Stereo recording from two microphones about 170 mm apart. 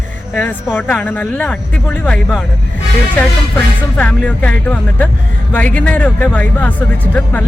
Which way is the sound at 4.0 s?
10° left (ahead or behind).